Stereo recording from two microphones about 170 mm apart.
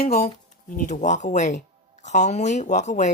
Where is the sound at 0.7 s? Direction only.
50° left (ahead or behind).